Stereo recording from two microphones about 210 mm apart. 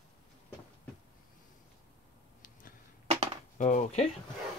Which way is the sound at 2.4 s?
40° left (ahead or behind).